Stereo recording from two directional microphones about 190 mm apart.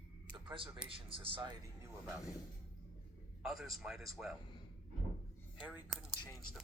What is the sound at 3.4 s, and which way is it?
Speech, centre (ahead or behind).